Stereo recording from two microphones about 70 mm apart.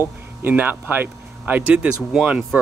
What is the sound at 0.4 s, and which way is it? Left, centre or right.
Speech, right.